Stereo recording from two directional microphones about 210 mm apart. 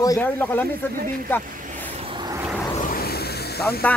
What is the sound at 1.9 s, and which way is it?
Vehicle, 25° right (ahead or behind).